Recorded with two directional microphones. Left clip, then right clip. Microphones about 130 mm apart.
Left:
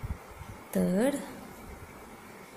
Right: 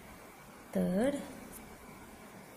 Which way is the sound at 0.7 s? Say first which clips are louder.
Left 4 dB; 15° left (ahead or behind).